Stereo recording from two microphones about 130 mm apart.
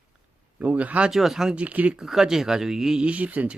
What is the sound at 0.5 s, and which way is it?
Speech, 10° right (ahead or behind).